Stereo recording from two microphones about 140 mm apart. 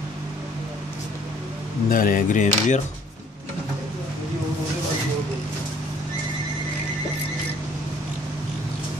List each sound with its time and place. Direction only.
1.9 s speech: 80° left; by 2.8 s 60° left (ahead or behind)